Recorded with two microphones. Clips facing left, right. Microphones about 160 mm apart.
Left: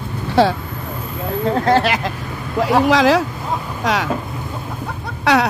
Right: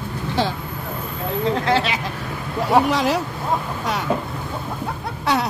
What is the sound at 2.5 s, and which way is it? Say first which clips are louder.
Vehicle: left 3 dB; 90° left.